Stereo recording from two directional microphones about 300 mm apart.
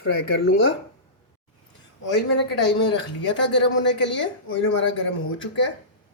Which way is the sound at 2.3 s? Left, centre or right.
Left.